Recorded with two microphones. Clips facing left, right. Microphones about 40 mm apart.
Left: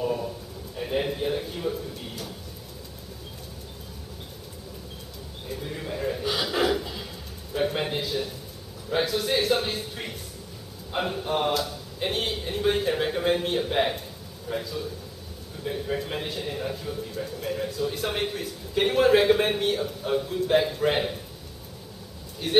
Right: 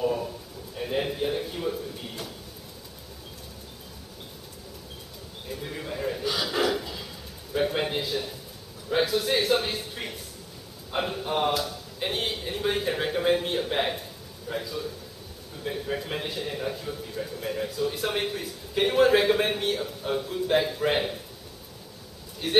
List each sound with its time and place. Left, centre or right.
0.8 s a man's voice: centre
5.8 s gasp: centre
6.2 s a sound: centre
14.5 s a man's voice: centre
22.4 s a man's voice: centre